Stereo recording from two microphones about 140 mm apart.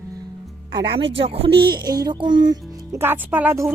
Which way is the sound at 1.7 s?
30° right (ahead or behind).